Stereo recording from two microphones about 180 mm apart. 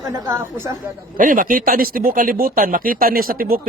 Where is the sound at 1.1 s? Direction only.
50° right (ahead or behind).